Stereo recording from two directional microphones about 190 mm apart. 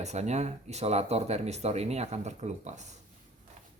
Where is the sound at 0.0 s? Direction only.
35° right (ahead or behind).